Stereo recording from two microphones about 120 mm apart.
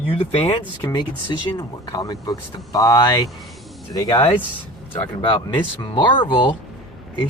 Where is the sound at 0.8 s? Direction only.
30° left (ahead or behind).